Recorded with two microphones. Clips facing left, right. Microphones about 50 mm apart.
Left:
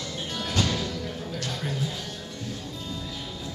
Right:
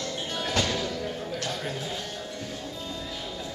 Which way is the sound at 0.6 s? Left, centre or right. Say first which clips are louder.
Even; centre.